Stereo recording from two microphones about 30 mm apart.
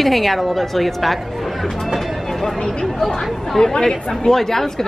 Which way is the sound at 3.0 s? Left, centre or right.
Centre.